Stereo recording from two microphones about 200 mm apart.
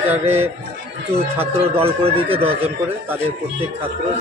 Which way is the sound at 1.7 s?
30° right (ahead or behind).